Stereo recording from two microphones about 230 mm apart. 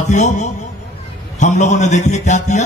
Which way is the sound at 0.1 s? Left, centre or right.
Left.